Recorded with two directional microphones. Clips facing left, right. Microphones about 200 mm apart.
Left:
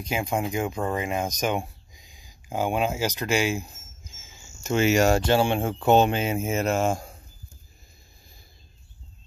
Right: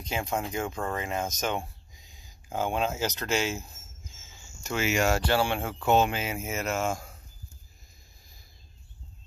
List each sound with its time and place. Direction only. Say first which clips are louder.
0.0 s speech: left 4 dB; 10° left (ahead or behind)
4.7 s speech: left 6 dB; 35° left (ahead or behind)
5.2 s speech: left 5 dB; 20° left (ahead or behind)